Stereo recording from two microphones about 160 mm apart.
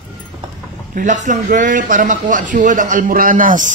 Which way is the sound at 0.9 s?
50° right (ahead or behind).